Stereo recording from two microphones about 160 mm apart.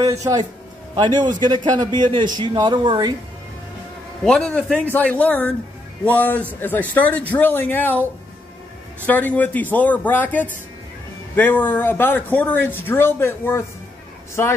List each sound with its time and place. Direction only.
0.0 s speech: 20° right (ahead or behind)
4.2 s speech: 5° left (ahead or behind)